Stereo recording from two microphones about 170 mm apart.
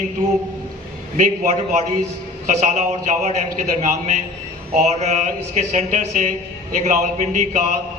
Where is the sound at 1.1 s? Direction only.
45° right (ahead or behind).